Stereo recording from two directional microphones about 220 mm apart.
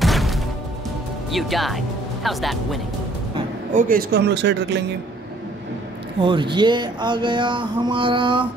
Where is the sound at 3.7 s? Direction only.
40° right (ahead or behind).